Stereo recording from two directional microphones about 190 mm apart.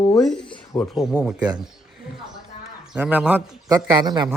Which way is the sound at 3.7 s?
20° right (ahead or behind).